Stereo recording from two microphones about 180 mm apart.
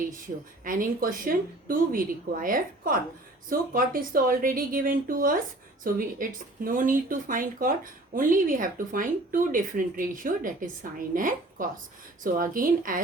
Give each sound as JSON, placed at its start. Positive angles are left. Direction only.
{"t": 0.6, "sound": "speech", "side_deg": -50}